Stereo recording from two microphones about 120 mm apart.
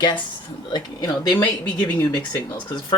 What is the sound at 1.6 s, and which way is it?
Speech, 10° left (ahead or behind).